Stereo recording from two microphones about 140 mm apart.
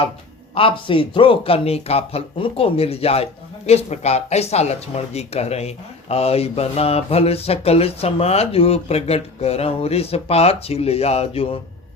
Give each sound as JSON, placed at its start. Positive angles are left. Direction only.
{"t": 0.5, "sound": "speech", "side_deg": 40}